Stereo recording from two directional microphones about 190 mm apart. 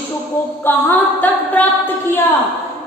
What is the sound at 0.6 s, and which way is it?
A woman's voice, 10° left (ahead or behind).